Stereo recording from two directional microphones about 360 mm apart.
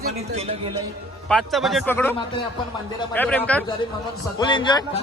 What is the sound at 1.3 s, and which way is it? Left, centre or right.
A man's voice, centre.